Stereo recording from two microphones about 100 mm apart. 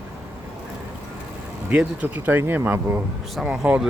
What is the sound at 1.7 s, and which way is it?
Speech, 15° right (ahead or behind).